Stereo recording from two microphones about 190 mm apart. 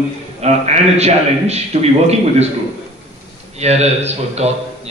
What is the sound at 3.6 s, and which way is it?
Speech, 35° right (ahead or behind).